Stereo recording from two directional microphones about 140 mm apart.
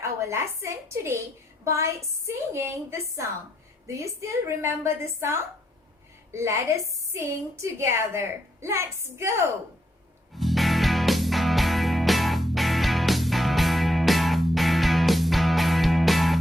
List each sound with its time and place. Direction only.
0.0 s a woman's voice: 20° right (ahead or behind)
10.3 s music: centre (ahead or behind)